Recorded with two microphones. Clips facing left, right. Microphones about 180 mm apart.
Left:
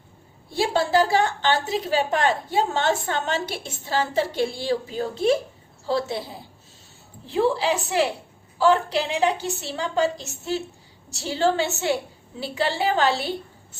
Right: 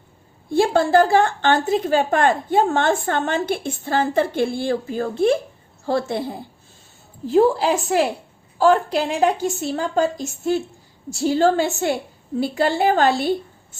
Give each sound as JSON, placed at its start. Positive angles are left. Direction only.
{"t": 0.5, "sound": "a woman's voice", "side_deg": -50}